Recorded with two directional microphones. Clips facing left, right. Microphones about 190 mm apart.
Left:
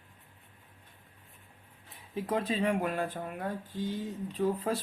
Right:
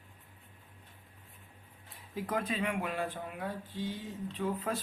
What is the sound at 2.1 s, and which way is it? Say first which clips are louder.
Speech: left 3 dB; 25° left (ahead or behind).